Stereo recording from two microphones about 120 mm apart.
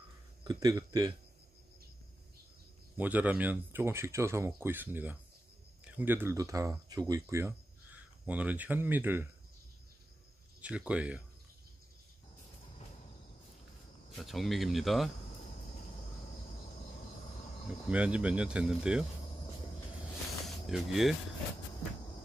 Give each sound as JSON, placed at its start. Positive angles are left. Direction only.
{"t": 0.4, "sound": "speech", "side_deg": -35}
{"t": 3.0, "sound": "speech", "side_deg": -15}
{"t": 8.3, "sound": "speech", "side_deg": -15}
{"t": 10.6, "sound": "speech", "side_deg": -10}
{"t": 14.1, "sound": "speech", "side_deg": 0}
{"t": 17.8, "sound": "speech", "side_deg": -10}
{"t": 20.4, "sound": "speech", "side_deg": 0}